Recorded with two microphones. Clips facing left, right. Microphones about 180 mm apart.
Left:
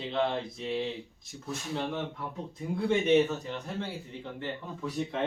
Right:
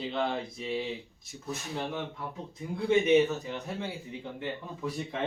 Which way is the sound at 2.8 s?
10° right (ahead or behind).